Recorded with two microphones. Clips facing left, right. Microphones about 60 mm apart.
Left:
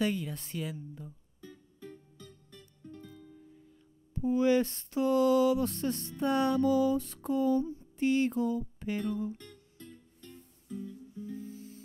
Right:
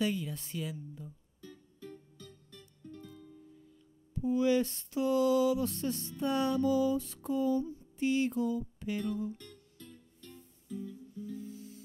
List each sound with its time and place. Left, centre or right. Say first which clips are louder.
0.0 s mantra: left 2 dB; left
1.4 s music: left 1 dB; centre
4.1 s mantra: left 2 dB; left
7.6 s music: left 3 dB; left